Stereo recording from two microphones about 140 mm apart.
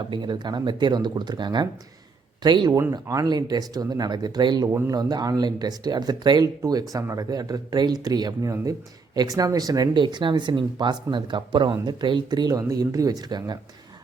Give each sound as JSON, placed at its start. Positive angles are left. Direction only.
{"t": 0.1, "sound": "speech", "side_deg": -30}